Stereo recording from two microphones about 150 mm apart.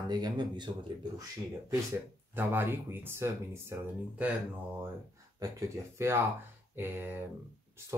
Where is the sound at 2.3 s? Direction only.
15° right (ahead or behind).